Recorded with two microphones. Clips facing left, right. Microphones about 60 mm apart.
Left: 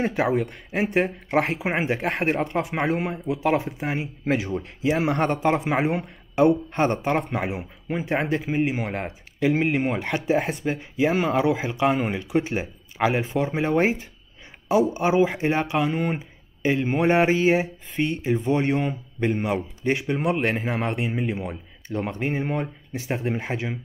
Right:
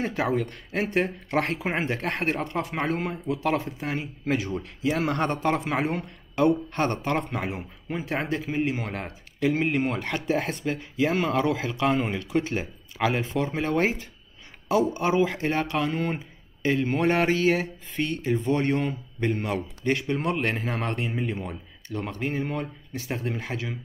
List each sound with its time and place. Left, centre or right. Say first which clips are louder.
0.0 s a man's voice: left 3 dB; centre